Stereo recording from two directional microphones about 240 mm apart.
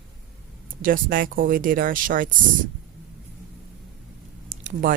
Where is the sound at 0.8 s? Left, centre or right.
Right.